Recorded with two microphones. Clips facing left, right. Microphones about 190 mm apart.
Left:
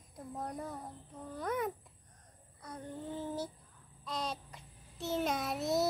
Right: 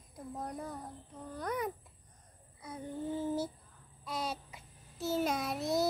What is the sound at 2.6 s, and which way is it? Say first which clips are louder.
Child singing: right 3 dB; 5° right (ahead or behind).